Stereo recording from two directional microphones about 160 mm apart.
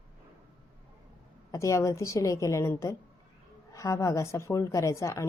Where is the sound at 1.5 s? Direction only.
20° left (ahead or behind).